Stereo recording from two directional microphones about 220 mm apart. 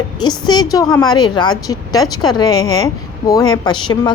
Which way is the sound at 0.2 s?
20° left (ahead or behind).